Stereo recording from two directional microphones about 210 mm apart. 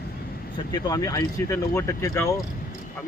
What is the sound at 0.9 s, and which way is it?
Speech, 15° left (ahead or behind).